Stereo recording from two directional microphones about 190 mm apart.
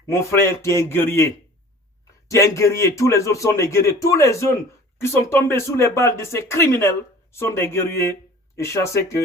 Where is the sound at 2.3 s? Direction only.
15° left (ahead or behind).